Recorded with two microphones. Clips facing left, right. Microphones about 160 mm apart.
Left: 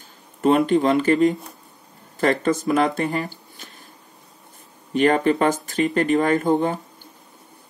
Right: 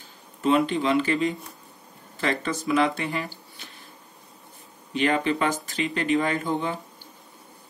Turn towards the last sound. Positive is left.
turn(degrees=50)  # may be behind; listen again after turning